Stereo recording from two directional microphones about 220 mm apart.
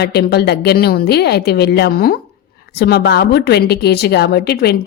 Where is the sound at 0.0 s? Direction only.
50° left (ahead or behind).